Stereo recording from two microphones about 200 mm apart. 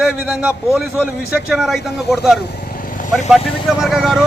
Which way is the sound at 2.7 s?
45° left (ahead or behind).